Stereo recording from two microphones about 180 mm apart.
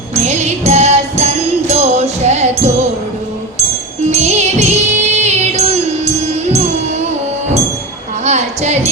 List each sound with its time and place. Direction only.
0.1 s music: 40° right (ahead or behind)
4.1 s music: 40° right (ahead or behind)
8.2 s a sound: 40° right (ahead or behind)